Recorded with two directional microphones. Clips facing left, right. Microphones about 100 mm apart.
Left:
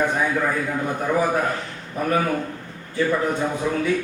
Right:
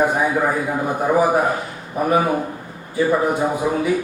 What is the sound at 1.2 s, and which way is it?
A man's voice, 20° right (ahead or behind).